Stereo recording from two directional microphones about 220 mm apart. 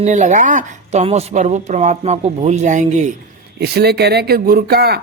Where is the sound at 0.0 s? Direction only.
35° right (ahead or behind).